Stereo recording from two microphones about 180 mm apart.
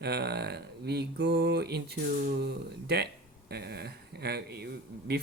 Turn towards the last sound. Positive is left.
turn(degrees=-65)  # may be behind; listen again after turning